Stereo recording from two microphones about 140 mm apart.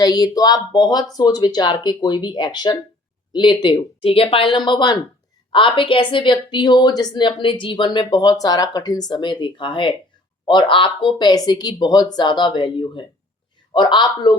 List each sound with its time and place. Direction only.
0.0 s speech: 30° left (ahead or behind)